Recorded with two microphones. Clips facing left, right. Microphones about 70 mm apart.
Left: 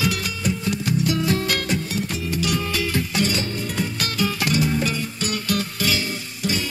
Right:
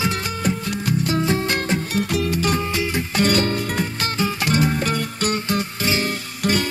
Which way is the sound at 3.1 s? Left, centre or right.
Right.